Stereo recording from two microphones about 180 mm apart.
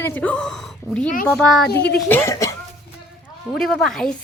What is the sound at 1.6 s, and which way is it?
Speech, 65° left (ahead or behind).